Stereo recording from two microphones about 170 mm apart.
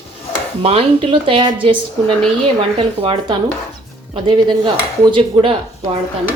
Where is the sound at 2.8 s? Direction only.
30° right (ahead or behind).